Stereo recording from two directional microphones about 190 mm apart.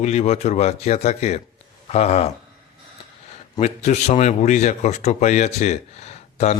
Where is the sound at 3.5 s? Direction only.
35° left (ahead or behind).